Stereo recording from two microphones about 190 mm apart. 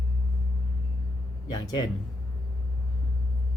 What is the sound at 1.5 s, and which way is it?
Speech, 20° left (ahead or behind).